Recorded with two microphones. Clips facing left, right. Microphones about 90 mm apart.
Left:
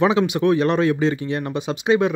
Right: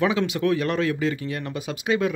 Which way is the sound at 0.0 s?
20° left (ahead or behind).